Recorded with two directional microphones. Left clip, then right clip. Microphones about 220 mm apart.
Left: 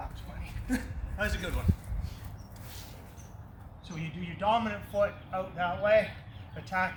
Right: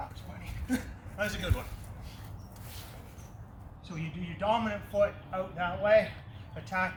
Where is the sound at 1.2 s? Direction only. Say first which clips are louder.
Even; 20° right (ahead or behind).